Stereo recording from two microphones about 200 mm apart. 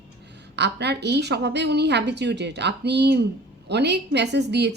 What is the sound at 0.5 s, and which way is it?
A woman's voice, 55° right (ahead or behind).